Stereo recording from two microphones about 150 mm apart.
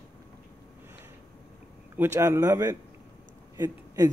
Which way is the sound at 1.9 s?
15° right (ahead or behind).